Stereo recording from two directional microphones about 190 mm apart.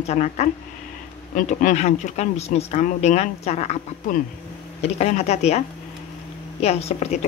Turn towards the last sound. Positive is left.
turn(degrees=35)  # may be behind; listen again after turning